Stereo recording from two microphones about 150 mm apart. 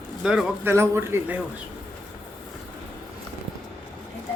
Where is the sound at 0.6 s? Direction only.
20° right (ahead or behind).